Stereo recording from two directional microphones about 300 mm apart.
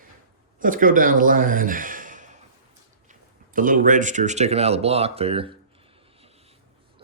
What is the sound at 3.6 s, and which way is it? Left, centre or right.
Speech, right.